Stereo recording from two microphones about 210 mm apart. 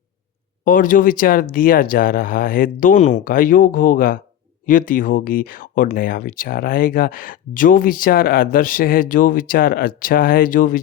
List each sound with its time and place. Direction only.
0.6 s speech: 40° left (ahead or behind)